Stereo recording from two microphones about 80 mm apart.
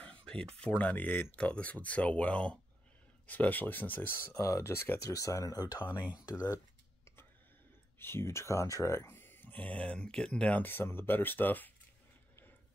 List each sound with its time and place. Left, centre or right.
0.0 s speech: centre
4.4 s speech: left
8.0 s speech: left; by 10.6 s centre
10.6 s speech: left